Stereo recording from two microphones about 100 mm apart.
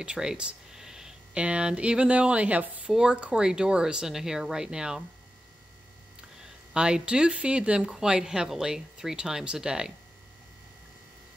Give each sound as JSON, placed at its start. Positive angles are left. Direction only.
{"t": 0.0, "sound": "speech", "side_deg": -10}
{"t": 6.7, "sound": "speech", "side_deg": -10}